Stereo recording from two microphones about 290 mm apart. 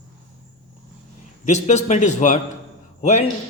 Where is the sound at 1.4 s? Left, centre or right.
Left.